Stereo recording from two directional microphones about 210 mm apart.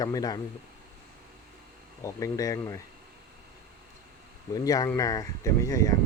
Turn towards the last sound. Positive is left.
turn(degrees=15)  # may be behind; listen again after turning